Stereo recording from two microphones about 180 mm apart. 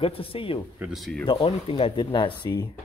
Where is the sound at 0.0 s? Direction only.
30° left (ahead or behind).